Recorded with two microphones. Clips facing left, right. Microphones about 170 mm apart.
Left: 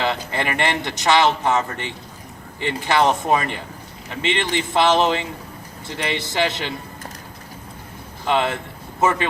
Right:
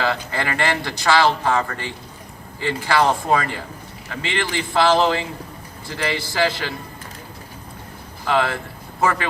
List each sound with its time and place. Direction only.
0.0 s speech: 20° left (ahead or behind)
8.2 s speech: 20° left (ahead or behind)